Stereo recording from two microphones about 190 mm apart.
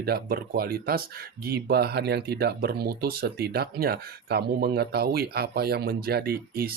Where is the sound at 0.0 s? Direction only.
55° right (ahead or behind).